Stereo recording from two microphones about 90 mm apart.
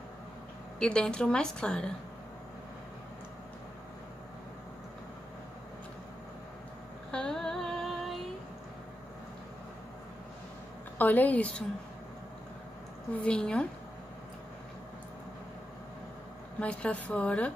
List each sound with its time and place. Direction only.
0.7 s a woman's voice: 10° left (ahead or behind)
7.1 s a sound: 10° left (ahead or behind)
11.0 s a woman's voice: 20° left (ahead or behind)
13.2 s a woman's voice: 10° left (ahead or behind)
16.5 s a woman's voice: 15° left (ahead or behind)